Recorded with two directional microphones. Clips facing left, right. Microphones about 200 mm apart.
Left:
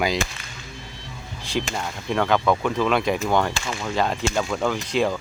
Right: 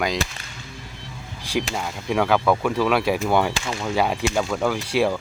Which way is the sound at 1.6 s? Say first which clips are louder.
Right 1 dB; 5° right (ahead or behind).